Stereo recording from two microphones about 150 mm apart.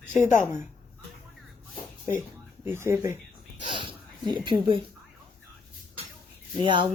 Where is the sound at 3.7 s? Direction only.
35° right (ahead or behind).